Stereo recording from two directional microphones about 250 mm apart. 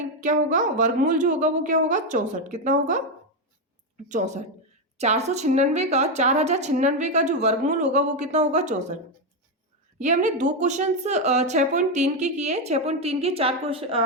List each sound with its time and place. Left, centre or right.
0.2 s a woman's voice: right
4.1 s a woman's voice: right
10.0 s a woman's voice: right